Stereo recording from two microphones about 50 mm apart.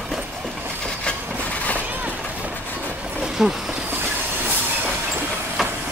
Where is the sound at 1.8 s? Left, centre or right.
Right.